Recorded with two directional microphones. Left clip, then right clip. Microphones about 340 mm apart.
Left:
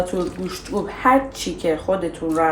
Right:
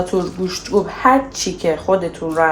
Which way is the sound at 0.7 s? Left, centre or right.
Right.